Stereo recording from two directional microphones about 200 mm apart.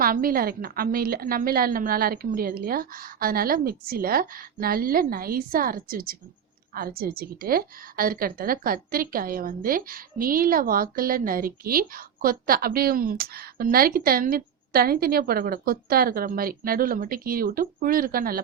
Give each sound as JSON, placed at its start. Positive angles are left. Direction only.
{"t": 0.0, "sound": "a woman's voice", "side_deg": -45}